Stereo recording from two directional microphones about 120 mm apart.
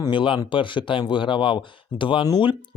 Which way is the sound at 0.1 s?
45° left (ahead or behind).